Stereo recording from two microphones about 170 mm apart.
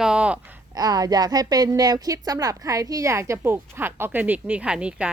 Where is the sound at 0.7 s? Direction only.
20° right (ahead or behind).